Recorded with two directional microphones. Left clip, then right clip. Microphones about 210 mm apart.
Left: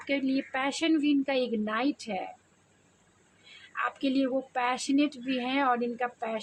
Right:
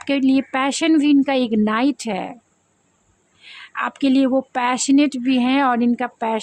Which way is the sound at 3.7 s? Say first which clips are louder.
Right 10 dB; 45° right (ahead or behind).